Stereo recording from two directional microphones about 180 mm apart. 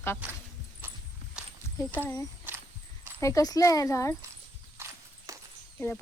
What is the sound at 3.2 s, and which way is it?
Speech, 15° left (ahead or behind).